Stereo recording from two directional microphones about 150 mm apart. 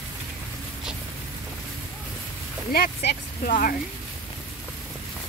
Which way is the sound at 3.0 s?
75° left (ahead or behind).